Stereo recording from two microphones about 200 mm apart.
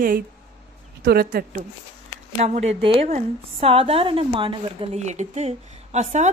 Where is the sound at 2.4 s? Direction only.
35° right (ahead or behind).